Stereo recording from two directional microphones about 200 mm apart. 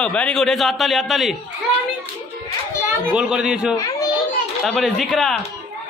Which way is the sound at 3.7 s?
15° left (ahead or behind).